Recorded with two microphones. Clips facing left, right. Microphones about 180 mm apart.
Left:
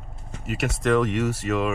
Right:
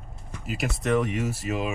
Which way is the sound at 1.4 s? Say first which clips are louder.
Left 5 dB; 70° left (ahead or behind).